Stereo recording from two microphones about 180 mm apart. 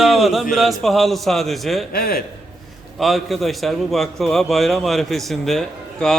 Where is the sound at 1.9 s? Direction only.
55° left (ahead or behind).